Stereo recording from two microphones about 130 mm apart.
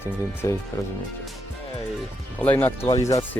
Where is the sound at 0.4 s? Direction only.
20° left (ahead or behind).